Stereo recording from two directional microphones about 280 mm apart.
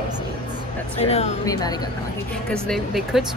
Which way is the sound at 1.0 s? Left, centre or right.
Left.